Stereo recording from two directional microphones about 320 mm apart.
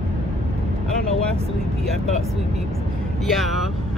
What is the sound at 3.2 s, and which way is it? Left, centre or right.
Speech, centre.